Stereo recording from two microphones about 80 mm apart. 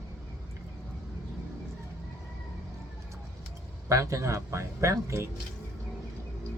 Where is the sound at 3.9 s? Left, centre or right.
Right.